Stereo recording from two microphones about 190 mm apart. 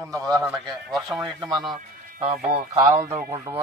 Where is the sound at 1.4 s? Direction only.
Centre (ahead or behind).